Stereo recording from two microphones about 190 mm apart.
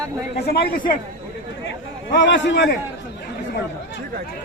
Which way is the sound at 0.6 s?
45° left (ahead or behind).